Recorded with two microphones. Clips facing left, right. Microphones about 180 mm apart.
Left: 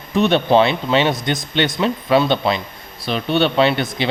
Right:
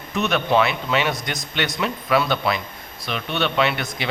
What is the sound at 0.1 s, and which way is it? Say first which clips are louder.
A man's voice: left 6 dB; 30° left (ahead or behind).